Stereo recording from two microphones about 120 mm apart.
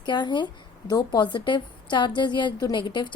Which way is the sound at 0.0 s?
40° left (ahead or behind).